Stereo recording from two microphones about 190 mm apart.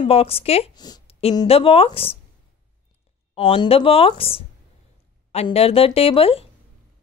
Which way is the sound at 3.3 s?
25° left (ahead or behind).